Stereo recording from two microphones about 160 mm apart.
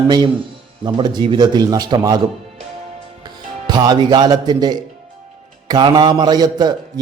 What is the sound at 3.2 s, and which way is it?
A man's voice, 25° right (ahead or behind).